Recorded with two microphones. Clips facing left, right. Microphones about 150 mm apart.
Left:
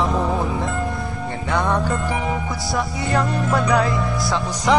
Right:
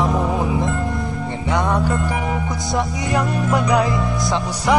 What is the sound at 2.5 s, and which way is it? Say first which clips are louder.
Music: right 2 dB; 20° right (ahead or behind).